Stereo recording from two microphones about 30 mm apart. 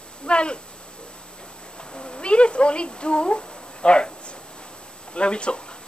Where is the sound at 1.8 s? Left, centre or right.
Left.